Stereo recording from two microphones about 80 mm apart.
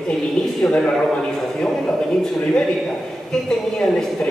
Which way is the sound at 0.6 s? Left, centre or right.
Centre.